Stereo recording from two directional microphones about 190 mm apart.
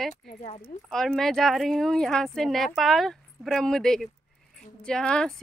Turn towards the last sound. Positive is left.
turn(degrees=5)  # may be behind; listen again after turning